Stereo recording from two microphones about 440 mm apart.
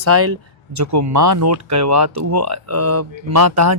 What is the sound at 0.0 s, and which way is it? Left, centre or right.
Speech, right.